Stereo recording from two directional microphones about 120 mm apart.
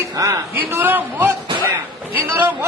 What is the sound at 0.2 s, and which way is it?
A man's voice, 20° right (ahead or behind).